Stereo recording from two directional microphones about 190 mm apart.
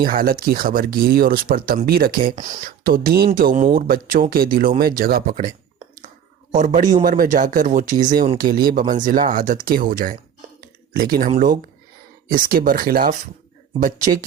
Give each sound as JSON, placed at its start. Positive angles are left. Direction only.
{"t": 0.0, "sound": "speech", "side_deg": -50}
{"t": 6.7, "sound": "speech", "side_deg": -45}
{"t": 10.6, "sound": "a sound", "side_deg": -50}
{"t": 12.3, "sound": "speech", "side_deg": -50}